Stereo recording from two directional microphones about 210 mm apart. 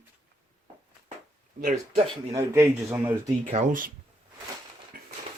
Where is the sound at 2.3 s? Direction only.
10° right (ahead or behind).